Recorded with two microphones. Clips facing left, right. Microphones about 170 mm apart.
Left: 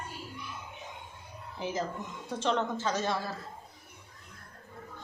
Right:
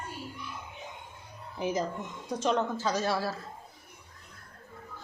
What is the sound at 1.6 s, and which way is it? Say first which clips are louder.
A woman's voice: right 3 dB; 20° right (ahead or behind).